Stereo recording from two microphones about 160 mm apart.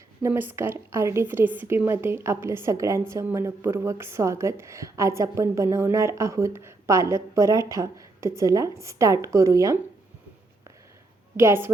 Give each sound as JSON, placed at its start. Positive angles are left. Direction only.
{"t": 0.2, "sound": "a woman's voice", "side_deg": -15}
{"t": 11.3, "sound": "a woman's voice", "side_deg": -15}